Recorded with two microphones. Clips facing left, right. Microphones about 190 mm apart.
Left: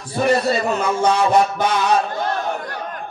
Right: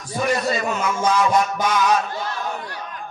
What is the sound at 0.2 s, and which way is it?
Speech, 30° left (ahead or behind).